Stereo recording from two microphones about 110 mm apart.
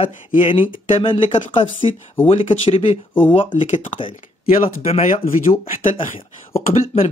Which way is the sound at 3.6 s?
90° left.